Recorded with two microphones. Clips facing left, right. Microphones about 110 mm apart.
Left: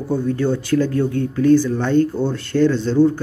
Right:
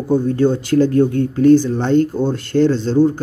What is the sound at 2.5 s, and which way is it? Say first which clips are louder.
Speech: right 2 dB; 30° right (ahead or behind).